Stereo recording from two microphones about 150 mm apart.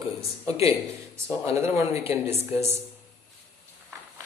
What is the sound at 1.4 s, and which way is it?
Speech, 15° right (ahead or behind).